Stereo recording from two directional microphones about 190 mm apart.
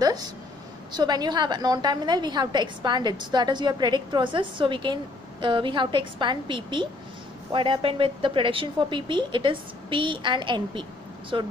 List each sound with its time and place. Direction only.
0.0 s a woman's voice: 20° right (ahead or behind)